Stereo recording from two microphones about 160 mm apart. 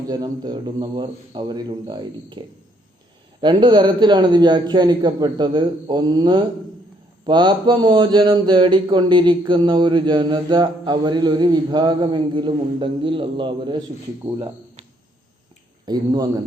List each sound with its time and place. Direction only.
0.1 s speech: 25° right (ahead or behind)
3.4 s speech: 30° right (ahead or behind)
15.9 s speech: 25° right (ahead or behind)